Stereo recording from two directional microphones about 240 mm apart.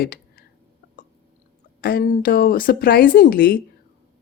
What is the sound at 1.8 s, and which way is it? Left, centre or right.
Speech, left.